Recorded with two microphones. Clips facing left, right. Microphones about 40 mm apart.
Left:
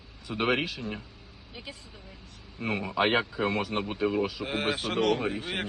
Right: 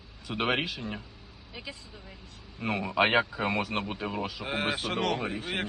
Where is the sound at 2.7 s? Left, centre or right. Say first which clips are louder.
Even; left.